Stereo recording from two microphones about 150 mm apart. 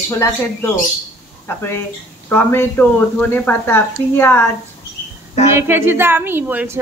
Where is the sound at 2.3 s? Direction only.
15° left (ahead or behind).